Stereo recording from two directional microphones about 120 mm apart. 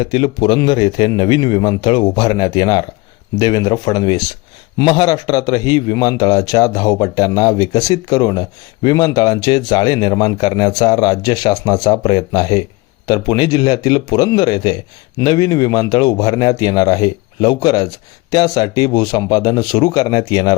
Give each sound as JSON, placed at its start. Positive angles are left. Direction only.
{"t": 0.0, "sound": "a man's voice", "side_deg": 45}